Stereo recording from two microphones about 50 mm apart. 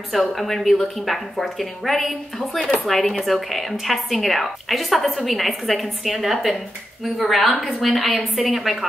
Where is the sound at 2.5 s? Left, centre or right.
Centre.